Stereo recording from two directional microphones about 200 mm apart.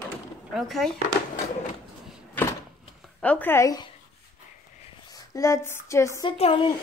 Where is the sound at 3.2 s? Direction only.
10° left (ahead or behind).